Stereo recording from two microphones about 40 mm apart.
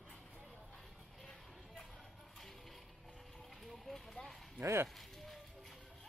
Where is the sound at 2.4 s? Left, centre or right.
Centre.